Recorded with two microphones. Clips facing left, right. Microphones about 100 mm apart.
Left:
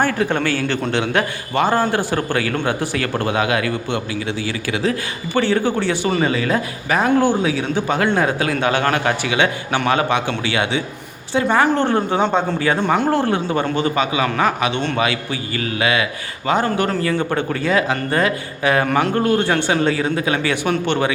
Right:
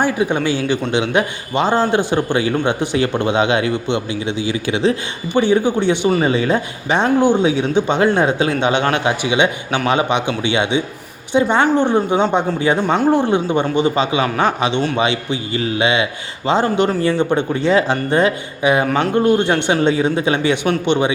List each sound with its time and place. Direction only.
0.0 s a man's voice: 15° right (ahead or behind)